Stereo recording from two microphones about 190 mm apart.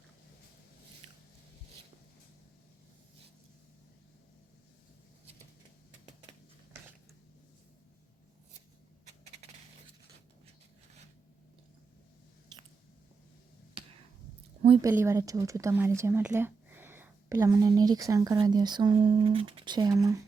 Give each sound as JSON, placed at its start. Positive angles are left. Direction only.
{"t": 14.8, "sound": "a woman's voice", "side_deg": -15}